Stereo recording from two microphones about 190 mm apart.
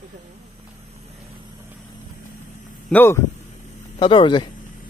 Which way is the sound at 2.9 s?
10° left (ahead or behind).